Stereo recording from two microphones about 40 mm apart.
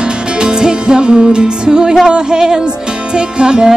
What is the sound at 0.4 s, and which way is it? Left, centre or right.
Music, centre.